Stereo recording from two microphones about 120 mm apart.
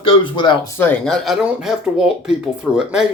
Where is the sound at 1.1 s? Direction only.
Centre (ahead or behind).